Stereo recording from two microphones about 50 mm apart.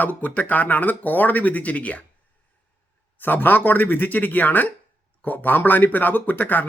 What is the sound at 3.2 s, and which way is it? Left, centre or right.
Speech, left.